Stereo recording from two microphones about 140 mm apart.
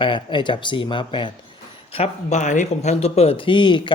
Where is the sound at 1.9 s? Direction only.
50° left (ahead or behind).